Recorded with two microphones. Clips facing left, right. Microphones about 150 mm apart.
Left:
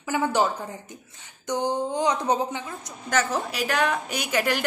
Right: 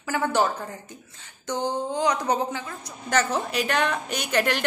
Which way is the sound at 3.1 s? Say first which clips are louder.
Right 1 dB; centre (ahead or behind).